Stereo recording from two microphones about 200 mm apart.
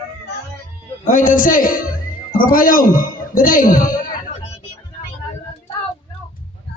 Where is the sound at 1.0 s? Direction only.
40° left (ahead or behind).